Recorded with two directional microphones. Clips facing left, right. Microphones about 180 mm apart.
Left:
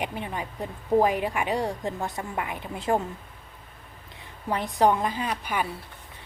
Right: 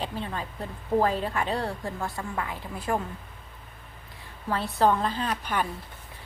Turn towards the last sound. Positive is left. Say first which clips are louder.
# even
turn(degrees=10)  # may be behind; listen again after turning